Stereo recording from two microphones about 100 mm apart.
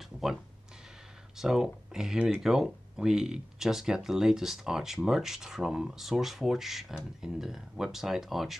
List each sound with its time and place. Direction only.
1.4 s speech: 5° right (ahead or behind)